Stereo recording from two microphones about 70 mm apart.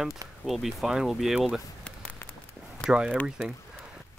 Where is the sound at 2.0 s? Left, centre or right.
Left.